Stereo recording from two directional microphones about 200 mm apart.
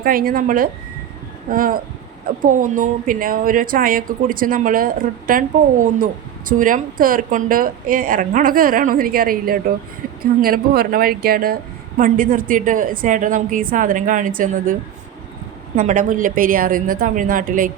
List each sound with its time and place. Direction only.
0.0 s speech: 45° right (ahead or behind)